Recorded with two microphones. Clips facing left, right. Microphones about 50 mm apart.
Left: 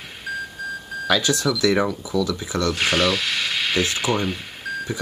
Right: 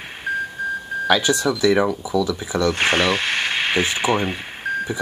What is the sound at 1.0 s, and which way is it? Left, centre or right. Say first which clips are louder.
Speech: right 2 dB; right.